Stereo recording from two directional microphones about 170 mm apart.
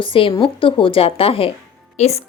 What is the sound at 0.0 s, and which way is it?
A woman's voice, 30° left (ahead or behind).